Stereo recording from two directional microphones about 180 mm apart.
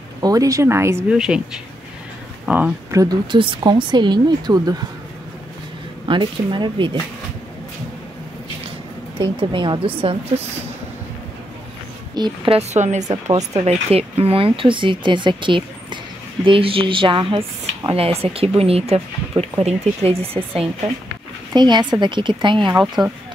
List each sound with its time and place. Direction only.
0.2 s speech: 20° right (ahead or behind)
1.1 s speech: 5° right (ahead or behind)
2.9 s speech: 20° right (ahead or behind)
6.0 s speech: 25° right (ahead or behind)
9.2 s speech: 30° right (ahead or behind)
12.2 s speech: 35° right (ahead or behind)